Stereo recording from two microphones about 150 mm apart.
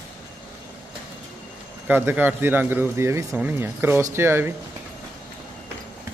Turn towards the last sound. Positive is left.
turn(degrees=-15)  # may be behind; listen again after turning